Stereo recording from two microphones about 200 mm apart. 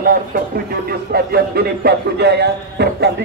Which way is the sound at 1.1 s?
50° right (ahead or behind).